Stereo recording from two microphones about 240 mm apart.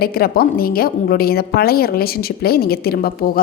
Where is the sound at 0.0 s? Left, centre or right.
Left.